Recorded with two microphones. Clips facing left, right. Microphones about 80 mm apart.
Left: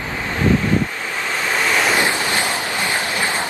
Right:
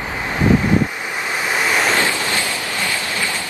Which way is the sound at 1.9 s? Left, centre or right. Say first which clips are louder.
Left 1 dB; left.